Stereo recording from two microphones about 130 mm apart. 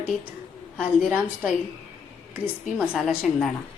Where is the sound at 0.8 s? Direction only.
Centre (ahead or behind).